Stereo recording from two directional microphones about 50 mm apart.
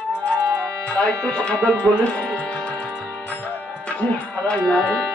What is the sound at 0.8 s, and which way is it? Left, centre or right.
Speech, left.